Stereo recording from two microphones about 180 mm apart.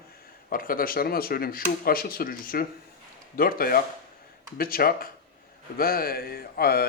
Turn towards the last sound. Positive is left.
turn(degrees=60)  # may be behind; listen again after turning